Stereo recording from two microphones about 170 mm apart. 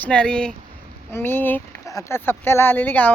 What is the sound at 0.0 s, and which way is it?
Speech, 5° left (ahead or behind).